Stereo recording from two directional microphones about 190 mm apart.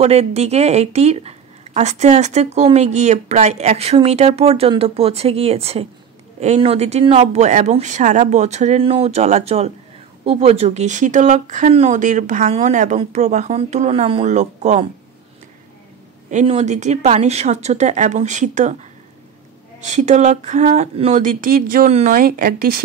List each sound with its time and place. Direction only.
0.0 s a woman's voice: 35° right (ahead or behind)
16.3 s a woman's voice: 35° right (ahead or behind)
19.8 s a woman's voice: 40° right (ahead or behind)